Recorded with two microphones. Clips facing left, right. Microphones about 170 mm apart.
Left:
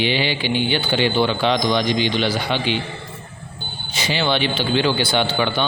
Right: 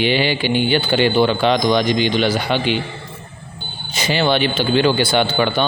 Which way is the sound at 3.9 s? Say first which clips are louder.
Right 4 dB; 45° right (ahead or behind).